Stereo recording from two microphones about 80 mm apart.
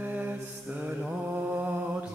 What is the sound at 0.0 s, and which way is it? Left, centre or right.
Mantra, centre.